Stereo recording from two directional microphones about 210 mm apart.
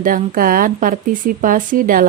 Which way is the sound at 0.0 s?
40° right (ahead or behind).